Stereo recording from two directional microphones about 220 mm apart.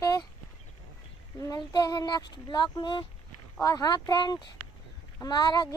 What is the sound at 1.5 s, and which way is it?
Speech, 15° left (ahead or behind).